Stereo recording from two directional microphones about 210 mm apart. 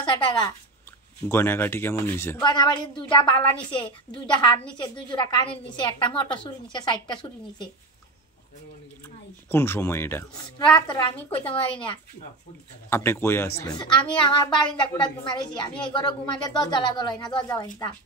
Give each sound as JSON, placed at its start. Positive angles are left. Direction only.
{"t": 0.0, "sound": "a sound", "side_deg": 25}
{"t": 1.3, "sound": "a woman's voice", "side_deg": 10}
{"t": 9.5, "sound": "a woman's voice", "side_deg": 10}
{"t": 10.6, "sound": "speech", "side_deg": 20}
{"t": 12.9, "sound": "speech", "side_deg": 10}